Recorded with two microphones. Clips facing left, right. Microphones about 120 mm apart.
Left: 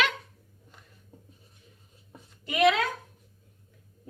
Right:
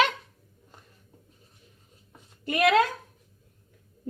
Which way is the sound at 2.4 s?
50° right (ahead or behind).